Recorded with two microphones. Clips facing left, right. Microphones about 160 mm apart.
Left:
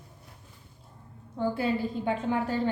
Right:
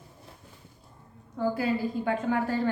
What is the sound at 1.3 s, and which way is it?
A woman's voice, 25° left (ahead or behind).